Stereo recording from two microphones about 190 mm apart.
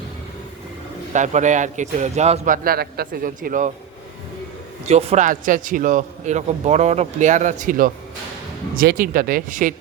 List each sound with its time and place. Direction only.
1.1 s a man's voice: 40° right (ahead or behind)
2.6 s speech: 55° right (ahead or behind)
4.9 s a man's voice: 35° right (ahead or behind)